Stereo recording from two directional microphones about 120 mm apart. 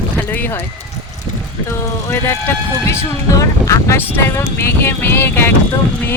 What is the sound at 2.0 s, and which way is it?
Speech, 20° left (ahead or behind).